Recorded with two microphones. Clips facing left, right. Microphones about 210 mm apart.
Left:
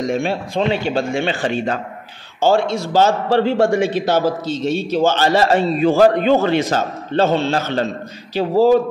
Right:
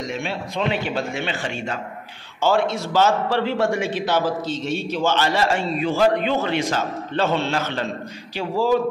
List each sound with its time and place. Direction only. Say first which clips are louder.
0.1 s speech: left 8 dB; 50° left (ahead or behind)
0.6 s a man's voice: left 5 dB; 30° left (ahead or behind)
2.9 s a man's voice: left 5 dB; 35° left (ahead or behind)